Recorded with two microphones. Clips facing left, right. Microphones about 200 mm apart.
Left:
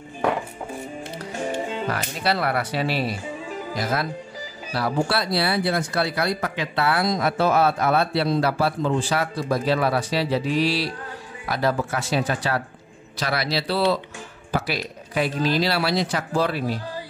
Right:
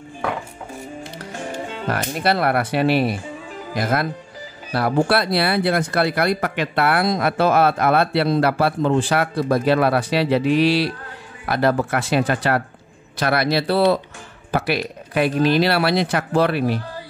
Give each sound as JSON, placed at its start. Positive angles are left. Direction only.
{"t": 1.9, "sound": "speech", "side_deg": -55}